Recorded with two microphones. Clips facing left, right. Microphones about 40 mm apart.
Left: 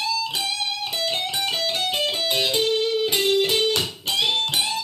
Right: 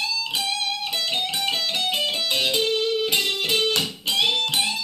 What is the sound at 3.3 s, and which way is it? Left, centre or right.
Music, right.